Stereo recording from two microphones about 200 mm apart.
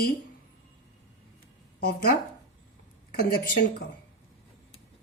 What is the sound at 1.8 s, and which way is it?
Speech, 50° left (ahead or behind).